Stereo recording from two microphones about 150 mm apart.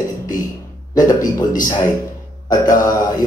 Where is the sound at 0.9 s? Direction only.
25° left (ahead or behind).